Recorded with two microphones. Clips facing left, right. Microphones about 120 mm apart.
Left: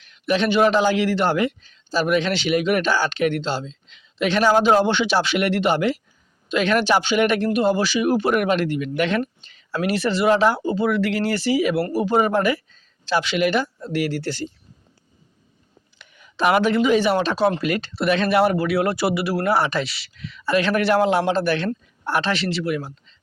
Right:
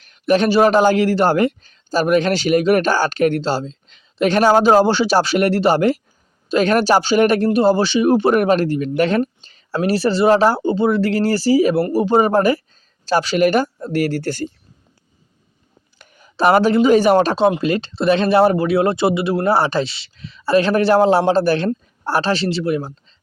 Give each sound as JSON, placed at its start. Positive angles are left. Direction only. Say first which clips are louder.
{"t": 0.0, "sound": "a man's voice", "louder": "right 5 dB", "side_deg": -45}
{"t": 16.0, "sound": "speech", "louder": "right 4 dB", "side_deg": -40}
{"t": 17.6, "sound": "speech", "louder": "right 4 dB", "side_deg": -25}